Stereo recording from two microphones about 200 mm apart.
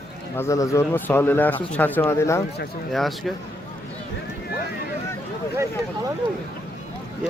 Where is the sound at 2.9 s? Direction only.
Centre (ahead or behind).